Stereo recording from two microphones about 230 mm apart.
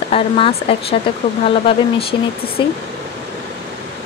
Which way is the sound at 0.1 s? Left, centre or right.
Left.